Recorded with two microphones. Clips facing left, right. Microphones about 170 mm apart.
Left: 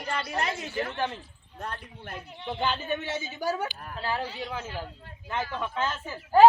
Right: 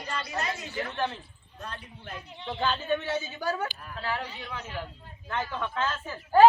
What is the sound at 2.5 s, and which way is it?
A woman's voice, 15° left (ahead or behind).